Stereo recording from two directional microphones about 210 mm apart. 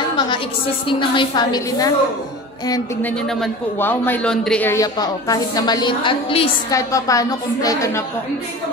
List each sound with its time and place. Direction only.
0.8 s a woman's voice: 25° left (ahead or behind)
3.3 s a man's voice: 5° left (ahead or behind)